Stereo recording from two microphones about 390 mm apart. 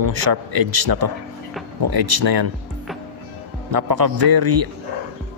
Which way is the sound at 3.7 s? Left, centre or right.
Right.